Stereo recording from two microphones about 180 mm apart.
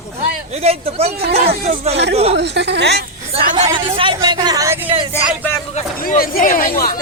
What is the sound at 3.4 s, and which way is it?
Speech, 45° right (ahead or behind).